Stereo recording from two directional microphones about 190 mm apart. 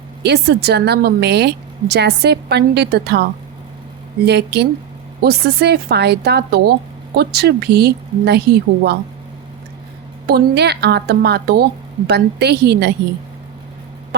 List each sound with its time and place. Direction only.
0.2 s a woman's voice: 60° right (ahead or behind)
10.2 s a woman's voice: 60° right (ahead or behind)